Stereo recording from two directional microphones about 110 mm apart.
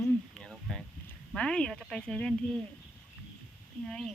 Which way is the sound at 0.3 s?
5° left (ahead or behind).